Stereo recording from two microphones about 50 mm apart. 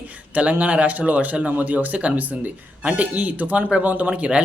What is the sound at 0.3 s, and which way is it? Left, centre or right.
Speech, right.